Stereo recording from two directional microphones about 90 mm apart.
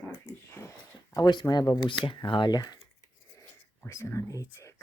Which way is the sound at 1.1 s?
50° left (ahead or behind).